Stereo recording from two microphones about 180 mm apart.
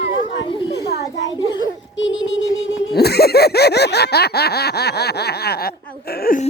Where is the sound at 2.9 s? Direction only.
60° left (ahead or behind).